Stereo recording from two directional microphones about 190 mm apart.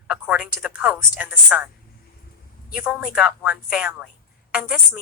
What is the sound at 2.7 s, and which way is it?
A woman's voice, centre (ahead or behind).